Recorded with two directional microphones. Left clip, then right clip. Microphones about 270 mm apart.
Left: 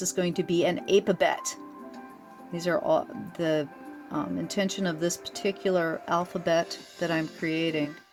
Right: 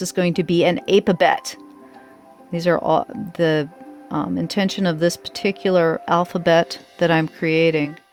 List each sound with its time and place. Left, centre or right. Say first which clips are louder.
0.0 s speech: right 7 dB; right